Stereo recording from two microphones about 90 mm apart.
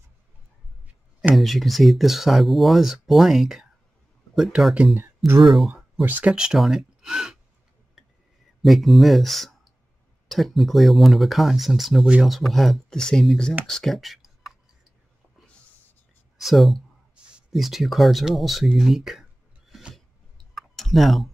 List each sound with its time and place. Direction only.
1.3 s speech: centre (ahead or behind)
4.9 s speech: 25° right (ahead or behind)
6.0 s speech: 10° right (ahead or behind)
8.6 s speech: centre (ahead or behind)
16.3 s speech: centre (ahead or behind)
20.5 s clicking: centre (ahead or behind)